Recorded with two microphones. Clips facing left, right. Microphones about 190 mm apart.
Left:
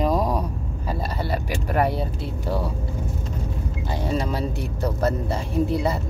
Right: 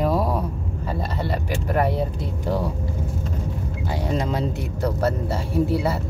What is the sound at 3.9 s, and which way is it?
Speech, 15° right (ahead or behind).